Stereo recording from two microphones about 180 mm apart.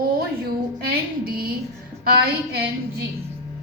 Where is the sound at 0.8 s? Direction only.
55° right (ahead or behind).